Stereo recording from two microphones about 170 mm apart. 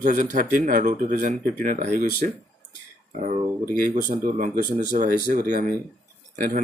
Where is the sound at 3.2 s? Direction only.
50° right (ahead or behind).